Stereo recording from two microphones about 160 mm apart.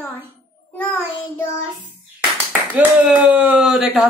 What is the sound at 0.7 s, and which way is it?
Child singing, 10° left (ahead or behind).